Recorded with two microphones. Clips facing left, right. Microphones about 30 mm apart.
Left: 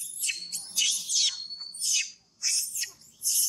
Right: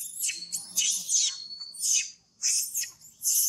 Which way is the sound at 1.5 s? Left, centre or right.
Left.